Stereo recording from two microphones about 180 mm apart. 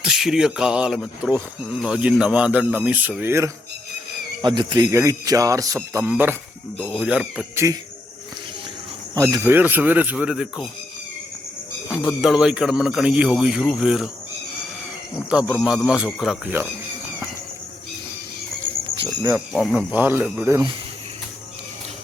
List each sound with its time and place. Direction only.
0.0 s a man's voice: 5° right (ahead or behind)
4.4 s a man's voice: 25° right (ahead or behind); by 7.6 s 5° right (ahead or behind)
9.1 s a man's voice: 15° right (ahead or behind)
11.9 s speech: centre (ahead or behind)
15.3 s speech: centre (ahead or behind)
19.5 s a man's voice: 5° right (ahead or behind)